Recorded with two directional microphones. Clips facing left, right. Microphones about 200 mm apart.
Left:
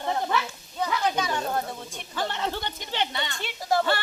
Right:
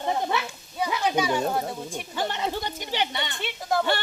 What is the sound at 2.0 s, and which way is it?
Speech, 15° right (ahead or behind).